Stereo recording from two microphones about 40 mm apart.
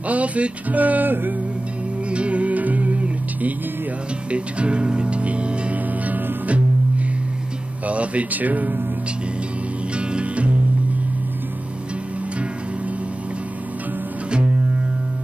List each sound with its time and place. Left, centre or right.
0.1 s speech: right
2.0 s music: right
6.0 s music: right
7.8 s speech: right
9.9 s music: right